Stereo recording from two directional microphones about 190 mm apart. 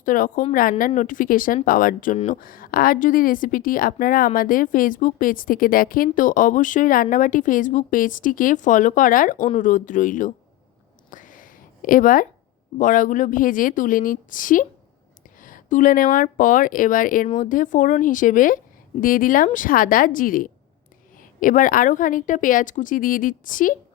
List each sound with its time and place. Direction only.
0.0 s a woman's voice: 45° left (ahead or behind)
2.1 s speech: 35° left (ahead or behind)
2.4 s a woman's voice: 50° left (ahead or behind)
11.1 s a sound: 45° left (ahead or behind)
12.8 s a woman's voice: 45° left (ahead or behind)